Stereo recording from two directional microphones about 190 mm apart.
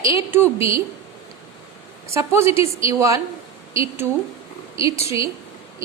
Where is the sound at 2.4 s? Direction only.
30° left (ahead or behind).